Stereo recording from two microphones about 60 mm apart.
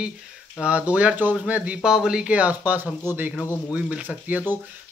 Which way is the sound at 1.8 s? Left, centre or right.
Centre.